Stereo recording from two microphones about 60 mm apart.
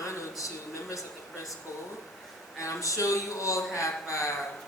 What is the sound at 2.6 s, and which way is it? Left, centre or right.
A woman's voice, left.